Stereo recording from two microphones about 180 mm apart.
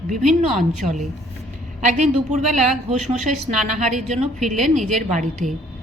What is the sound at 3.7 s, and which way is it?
Speech, 45° right (ahead or behind).